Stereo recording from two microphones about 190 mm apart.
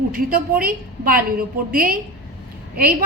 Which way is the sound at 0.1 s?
50° right (ahead or behind).